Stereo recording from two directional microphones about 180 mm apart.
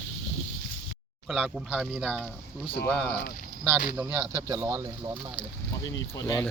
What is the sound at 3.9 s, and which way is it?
Speech, 10° right (ahead or behind).